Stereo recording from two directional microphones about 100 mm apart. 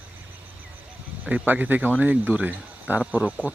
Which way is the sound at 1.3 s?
15° right (ahead or behind).